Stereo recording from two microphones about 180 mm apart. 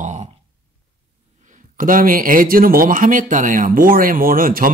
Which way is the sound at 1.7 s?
50° right (ahead or behind).